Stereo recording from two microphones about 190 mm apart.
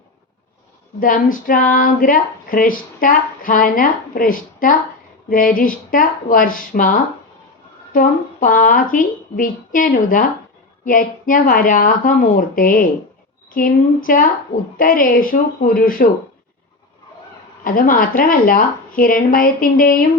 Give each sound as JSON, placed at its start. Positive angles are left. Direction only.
{"t": 0.9, "sound": "speech", "side_deg": 45}
{"t": 7.9, "sound": "speech", "side_deg": 45}
{"t": 17.6, "sound": "speech", "side_deg": 45}